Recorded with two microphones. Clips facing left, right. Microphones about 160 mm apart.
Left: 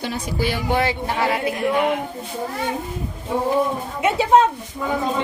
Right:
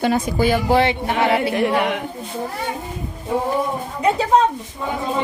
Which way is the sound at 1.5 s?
70° right (ahead or behind).